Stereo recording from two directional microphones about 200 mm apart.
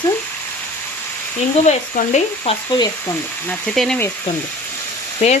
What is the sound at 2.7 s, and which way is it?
Speech, 20° left (ahead or behind).